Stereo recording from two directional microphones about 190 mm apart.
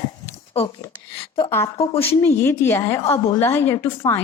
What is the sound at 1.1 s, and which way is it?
Speech, 30° left (ahead or behind).